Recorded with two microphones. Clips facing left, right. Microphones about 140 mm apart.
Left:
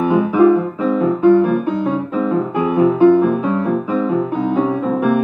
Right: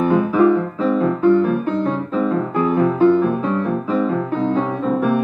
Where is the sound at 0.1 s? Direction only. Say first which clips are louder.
Left 4 dB; 10° left (ahead or behind).